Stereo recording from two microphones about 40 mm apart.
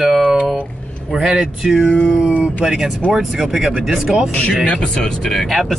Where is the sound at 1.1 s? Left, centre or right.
Centre.